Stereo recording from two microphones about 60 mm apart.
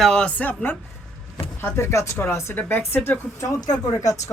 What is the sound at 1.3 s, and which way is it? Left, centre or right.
Speech, left.